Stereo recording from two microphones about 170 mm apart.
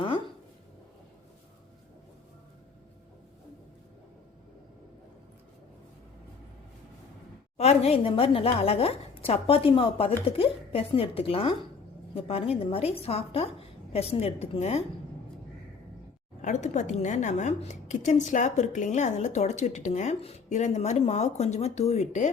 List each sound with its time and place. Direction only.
7.5 s a woman's voice: 40° left (ahead or behind)
16.4 s a woman's voice: 45° left (ahead or behind)